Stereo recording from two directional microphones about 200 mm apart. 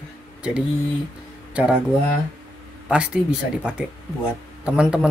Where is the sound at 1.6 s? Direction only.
5° right (ahead or behind).